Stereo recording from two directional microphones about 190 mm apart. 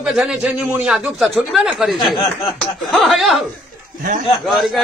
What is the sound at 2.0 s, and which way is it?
Speech, 25° left (ahead or behind).